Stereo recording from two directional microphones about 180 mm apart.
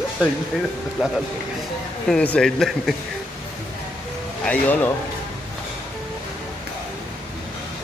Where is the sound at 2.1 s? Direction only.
5° left (ahead or behind).